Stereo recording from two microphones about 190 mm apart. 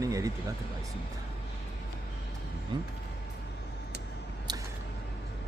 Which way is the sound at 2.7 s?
25° right (ahead or behind).